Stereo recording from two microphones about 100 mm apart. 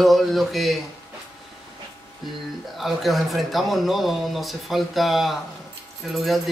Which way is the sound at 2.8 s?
Centre (ahead or behind).